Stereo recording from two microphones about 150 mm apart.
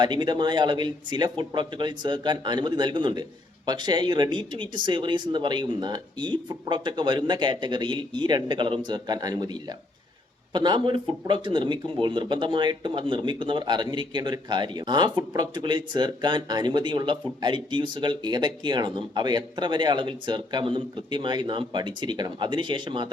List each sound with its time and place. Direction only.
0.0 s speech: 30° right (ahead or behind)